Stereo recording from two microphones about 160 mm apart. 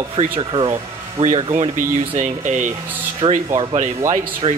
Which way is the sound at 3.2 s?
35° right (ahead or behind).